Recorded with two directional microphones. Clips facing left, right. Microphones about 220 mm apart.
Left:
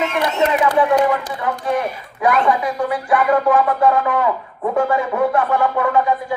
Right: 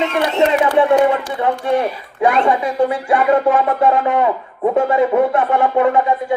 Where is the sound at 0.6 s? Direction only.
25° right (ahead or behind).